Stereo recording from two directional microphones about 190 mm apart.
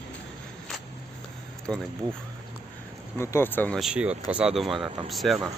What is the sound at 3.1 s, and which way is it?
Speech, 15° left (ahead or behind).